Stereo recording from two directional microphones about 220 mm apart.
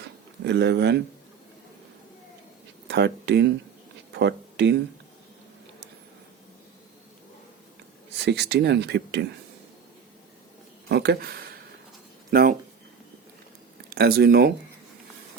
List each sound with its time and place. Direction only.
0.4 s speech: 50° right (ahead or behind)
2.8 s speech: 50° right (ahead or behind)
8.1 s speech: 50° right (ahead or behind)
10.8 s speech: 50° right (ahead or behind)
13.9 s speech: 45° right (ahead or behind)